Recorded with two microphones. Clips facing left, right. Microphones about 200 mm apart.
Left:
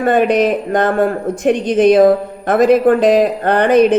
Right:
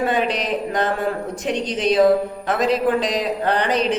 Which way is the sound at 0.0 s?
55° left (ahead or behind).